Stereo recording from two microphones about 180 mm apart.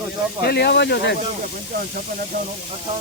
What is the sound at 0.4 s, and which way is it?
Speech, 65° left (ahead or behind).